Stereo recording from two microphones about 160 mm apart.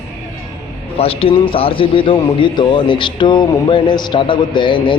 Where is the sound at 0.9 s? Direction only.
35° left (ahead or behind).